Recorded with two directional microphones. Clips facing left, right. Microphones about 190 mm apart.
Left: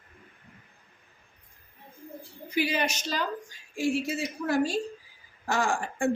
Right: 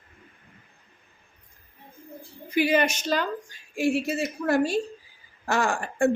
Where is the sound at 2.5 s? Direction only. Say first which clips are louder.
Right 6 dB; 55° right (ahead or behind).